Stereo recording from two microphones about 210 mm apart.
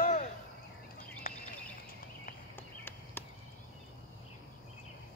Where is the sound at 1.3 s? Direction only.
40° left (ahead or behind).